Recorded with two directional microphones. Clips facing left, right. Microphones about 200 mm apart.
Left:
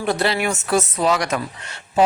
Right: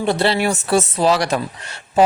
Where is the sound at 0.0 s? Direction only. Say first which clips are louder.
Right 3 dB; 30° right (ahead or behind).